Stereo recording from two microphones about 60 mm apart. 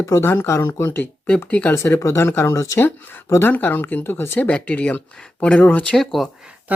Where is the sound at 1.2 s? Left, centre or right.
Centre.